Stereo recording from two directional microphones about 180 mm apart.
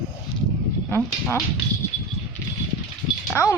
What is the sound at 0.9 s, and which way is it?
Speech, 10° left (ahead or behind).